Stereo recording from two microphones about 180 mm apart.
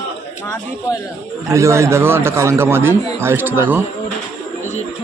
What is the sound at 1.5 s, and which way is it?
A man's voice, 15° right (ahead or behind).